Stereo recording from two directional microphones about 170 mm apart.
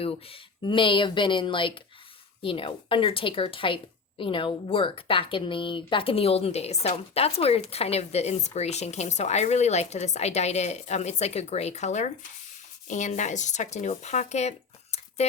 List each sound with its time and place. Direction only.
0.0 s speech: 35° left (ahead or behind)